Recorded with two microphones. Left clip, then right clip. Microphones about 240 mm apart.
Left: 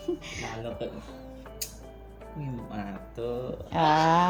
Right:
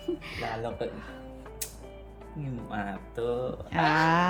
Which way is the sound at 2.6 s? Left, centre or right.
Centre.